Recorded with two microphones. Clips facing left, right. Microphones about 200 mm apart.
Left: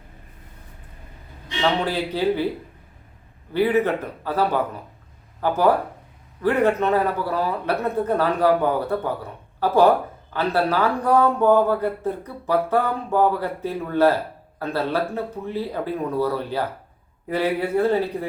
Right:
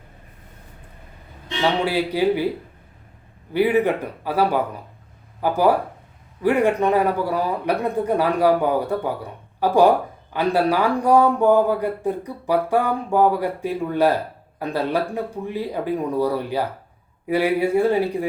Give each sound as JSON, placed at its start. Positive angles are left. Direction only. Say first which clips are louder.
{"t": 1.8, "sound": "speech", "louder": "right 3 dB", "side_deg": -10}
{"t": 3.5, "sound": "speech", "louder": "right 1 dB", "side_deg": -15}